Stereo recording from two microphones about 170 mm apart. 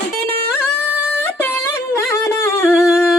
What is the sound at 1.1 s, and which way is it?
Music, 15° left (ahead or behind).